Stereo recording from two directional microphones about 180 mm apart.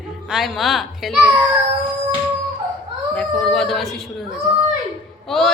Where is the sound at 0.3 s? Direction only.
Centre (ahead or behind).